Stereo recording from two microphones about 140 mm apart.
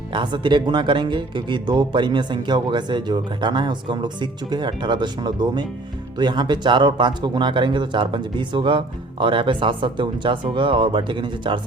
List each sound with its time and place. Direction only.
0.1 s speech: 35° right (ahead or behind)